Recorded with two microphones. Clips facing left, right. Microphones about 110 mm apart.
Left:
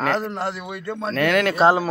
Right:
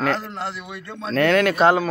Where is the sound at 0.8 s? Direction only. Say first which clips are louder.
Left 8 dB; 40° left (ahead or behind).